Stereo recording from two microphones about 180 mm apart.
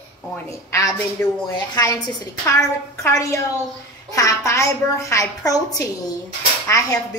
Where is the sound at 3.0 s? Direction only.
15° left (ahead or behind).